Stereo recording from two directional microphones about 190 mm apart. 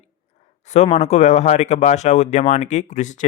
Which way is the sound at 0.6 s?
35° left (ahead or behind).